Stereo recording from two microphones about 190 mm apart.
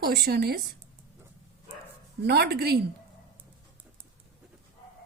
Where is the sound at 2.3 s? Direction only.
55° right (ahead or behind).